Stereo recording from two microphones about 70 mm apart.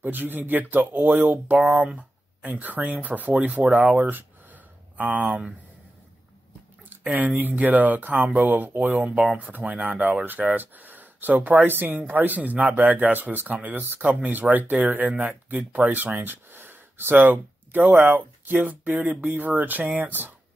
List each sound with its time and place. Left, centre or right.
0.0 s speech: right
7.0 s speech: right